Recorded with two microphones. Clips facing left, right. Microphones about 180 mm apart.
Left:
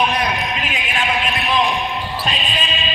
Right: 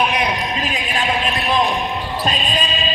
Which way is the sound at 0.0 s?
10° right (ahead or behind).